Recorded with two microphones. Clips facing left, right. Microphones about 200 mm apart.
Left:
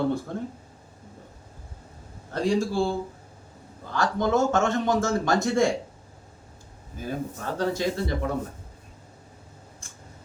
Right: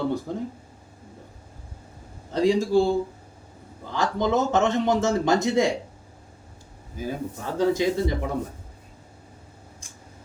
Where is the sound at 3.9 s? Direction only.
20° right (ahead or behind).